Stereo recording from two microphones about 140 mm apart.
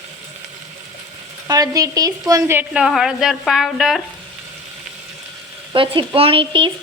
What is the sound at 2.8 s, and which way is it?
Speech, 5° right (ahead or behind).